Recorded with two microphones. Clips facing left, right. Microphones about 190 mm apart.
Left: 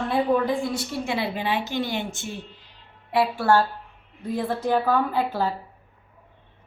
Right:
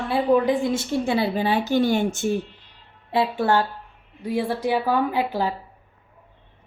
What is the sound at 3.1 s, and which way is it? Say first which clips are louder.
A woman's voice: even; 25° right (ahead or behind).